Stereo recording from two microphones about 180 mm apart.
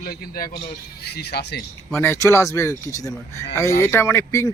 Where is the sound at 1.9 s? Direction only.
15° left (ahead or behind).